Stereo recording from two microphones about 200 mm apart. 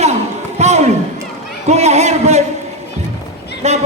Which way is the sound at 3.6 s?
35° right (ahead or behind).